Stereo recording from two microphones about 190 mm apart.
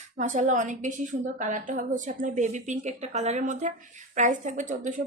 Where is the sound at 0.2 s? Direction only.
40° right (ahead or behind).